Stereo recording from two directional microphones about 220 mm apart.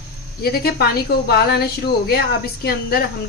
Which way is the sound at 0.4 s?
45° left (ahead or behind).